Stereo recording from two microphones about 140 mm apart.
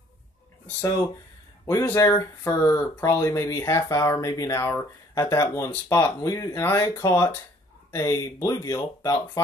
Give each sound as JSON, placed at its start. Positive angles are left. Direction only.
{"t": 1.9, "sound": "speech", "side_deg": 15}